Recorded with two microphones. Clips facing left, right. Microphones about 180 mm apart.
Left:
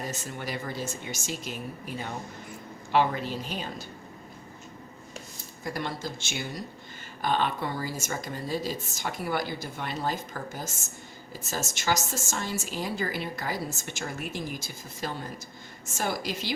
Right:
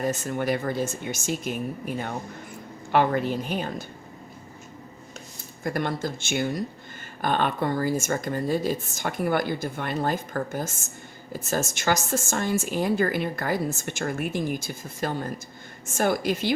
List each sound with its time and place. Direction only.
0.0 s speech: 50° right (ahead or behind)
2.9 s speech: 50° right (ahead or behind)
5.6 s a woman's voice: 55° right (ahead or behind)